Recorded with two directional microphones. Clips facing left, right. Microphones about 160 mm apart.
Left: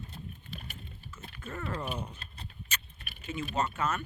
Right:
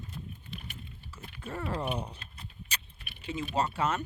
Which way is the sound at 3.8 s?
25° right (ahead or behind).